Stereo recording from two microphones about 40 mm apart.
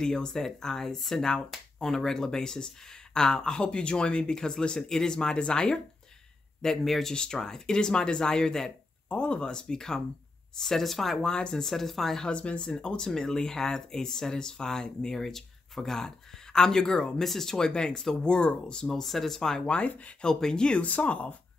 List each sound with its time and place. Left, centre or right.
0.0 s speech: centre
6.6 s speech: centre
9.1 s speech: left
10.6 s speech: centre
11.2 s speech: centre
11.6 s speech: centre
12.2 s speech: left
18.9 s speech: centre
19.6 s speech: left
20.2 s speech: centre
20.8 s speech: left